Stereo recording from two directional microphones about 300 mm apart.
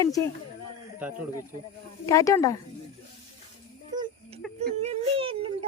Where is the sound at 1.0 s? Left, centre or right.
Centre.